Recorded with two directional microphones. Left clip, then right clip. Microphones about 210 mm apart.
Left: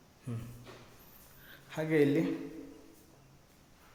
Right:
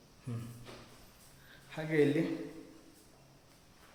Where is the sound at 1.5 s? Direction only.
25° left (ahead or behind).